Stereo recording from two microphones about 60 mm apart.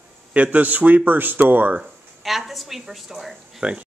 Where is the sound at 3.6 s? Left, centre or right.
Right.